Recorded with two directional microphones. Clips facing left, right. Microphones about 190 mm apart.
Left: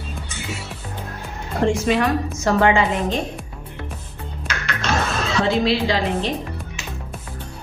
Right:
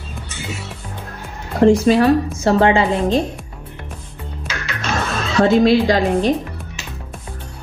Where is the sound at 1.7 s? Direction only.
35° right (ahead or behind).